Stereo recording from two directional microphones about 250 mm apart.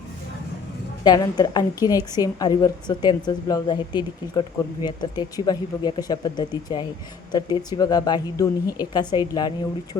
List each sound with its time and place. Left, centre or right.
1.0 s a woman's voice: centre